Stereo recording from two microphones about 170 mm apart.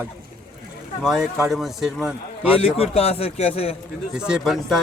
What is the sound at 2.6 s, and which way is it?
A man's voice, 35° left (ahead or behind).